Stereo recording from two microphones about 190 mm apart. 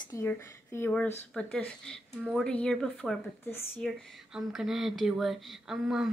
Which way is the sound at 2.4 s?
5° left (ahead or behind).